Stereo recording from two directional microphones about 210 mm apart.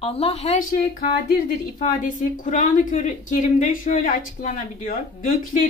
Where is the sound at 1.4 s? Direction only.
40° left (ahead or behind).